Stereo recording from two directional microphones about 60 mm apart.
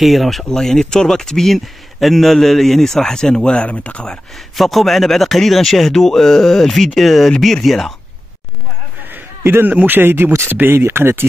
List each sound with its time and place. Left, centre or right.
0.0 s speech: centre
4.6 s speech: centre
9.4 s speech: right